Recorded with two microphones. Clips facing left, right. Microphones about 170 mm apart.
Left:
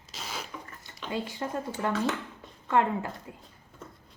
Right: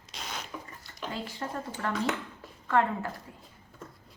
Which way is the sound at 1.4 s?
20° left (ahead or behind).